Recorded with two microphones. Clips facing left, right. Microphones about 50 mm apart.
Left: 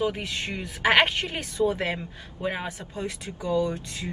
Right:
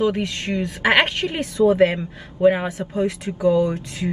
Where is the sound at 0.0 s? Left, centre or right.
Right.